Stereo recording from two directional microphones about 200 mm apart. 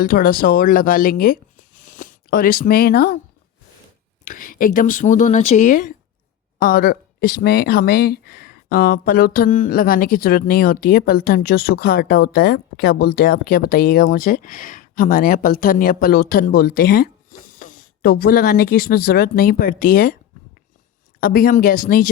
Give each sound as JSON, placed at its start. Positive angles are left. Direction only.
{"t": 0.1, "sound": "speech", "side_deg": 45}
{"t": 4.3, "sound": "speech", "side_deg": 45}
{"t": 21.2, "sound": "speech", "side_deg": 45}